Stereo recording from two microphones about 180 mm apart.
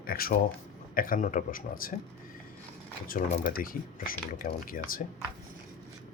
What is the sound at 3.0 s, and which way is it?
Speech, 50° left (ahead or behind).